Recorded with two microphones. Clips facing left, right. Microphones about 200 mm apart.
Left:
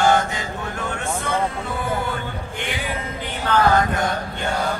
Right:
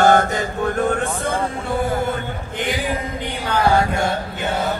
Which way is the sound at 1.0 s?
35° right (ahead or behind).